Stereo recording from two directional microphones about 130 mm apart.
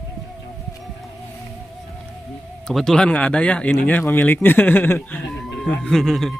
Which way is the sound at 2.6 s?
5° left (ahead or behind).